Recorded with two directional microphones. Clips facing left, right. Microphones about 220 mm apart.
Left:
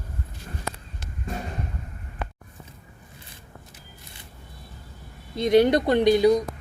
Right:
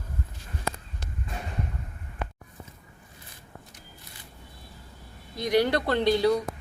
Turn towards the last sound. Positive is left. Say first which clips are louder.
# left 5 dB
turn(degrees=15)  # may be behind; listen again after turning